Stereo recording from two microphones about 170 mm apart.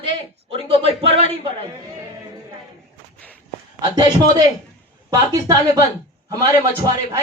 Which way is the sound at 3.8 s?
25° right (ahead or behind).